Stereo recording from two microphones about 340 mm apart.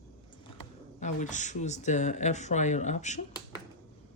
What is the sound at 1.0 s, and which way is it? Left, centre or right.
Speech, left.